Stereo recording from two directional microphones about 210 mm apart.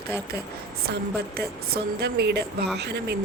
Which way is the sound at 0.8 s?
50° right (ahead or behind).